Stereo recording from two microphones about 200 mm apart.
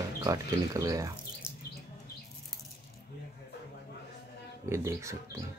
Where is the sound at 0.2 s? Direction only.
15° right (ahead or behind).